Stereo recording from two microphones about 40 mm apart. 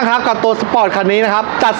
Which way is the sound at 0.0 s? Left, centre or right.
Centre.